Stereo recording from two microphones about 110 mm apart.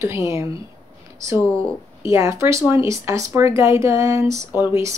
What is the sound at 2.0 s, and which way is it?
Speech, 25° right (ahead or behind).